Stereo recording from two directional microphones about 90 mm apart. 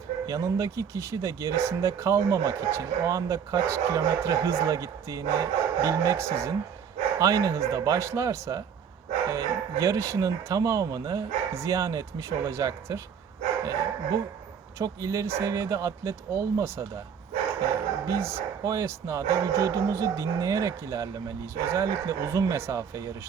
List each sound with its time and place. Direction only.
0.3 s speech: 40° right (ahead or behind)
18.0 s speech: 35° right (ahead or behind)